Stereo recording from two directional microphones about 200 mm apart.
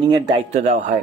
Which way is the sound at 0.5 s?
35° right (ahead or behind).